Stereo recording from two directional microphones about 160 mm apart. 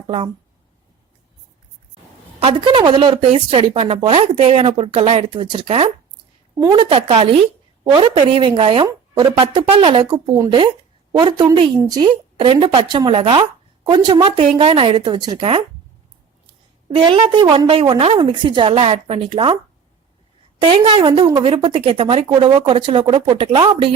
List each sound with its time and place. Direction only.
2.4 s a woman's voice: 30° right (ahead or behind)
16.9 s a woman's voice: 30° right (ahead or behind)
20.6 s a woman's voice: 35° right (ahead or behind)